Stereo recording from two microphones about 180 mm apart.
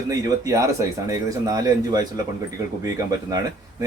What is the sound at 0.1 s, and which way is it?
A man's voice, 20° right (ahead or behind).